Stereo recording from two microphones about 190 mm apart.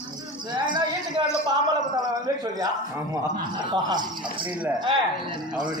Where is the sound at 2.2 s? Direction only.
20° right (ahead or behind).